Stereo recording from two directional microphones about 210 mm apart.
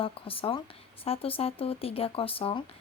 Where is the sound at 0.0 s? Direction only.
25° left (ahead or behind).